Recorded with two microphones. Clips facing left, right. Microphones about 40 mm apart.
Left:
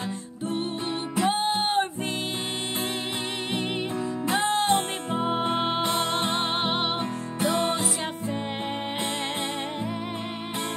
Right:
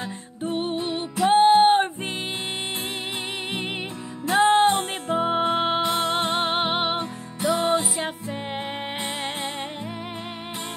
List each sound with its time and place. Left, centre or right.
1.2 s music: right
4.4 s music: right; by 8.1 s centre